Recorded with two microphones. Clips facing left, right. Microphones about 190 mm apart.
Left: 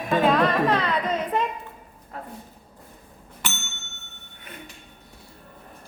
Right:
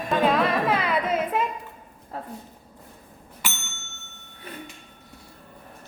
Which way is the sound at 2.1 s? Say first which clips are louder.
Right 2 dB; 30° right (ahead or behind).